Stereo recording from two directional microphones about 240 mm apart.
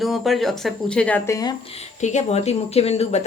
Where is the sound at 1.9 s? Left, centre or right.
Left.